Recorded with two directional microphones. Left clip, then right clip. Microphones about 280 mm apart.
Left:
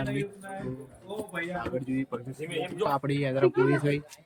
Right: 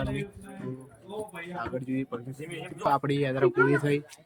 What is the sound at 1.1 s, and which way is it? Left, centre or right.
Keys jangling, centre.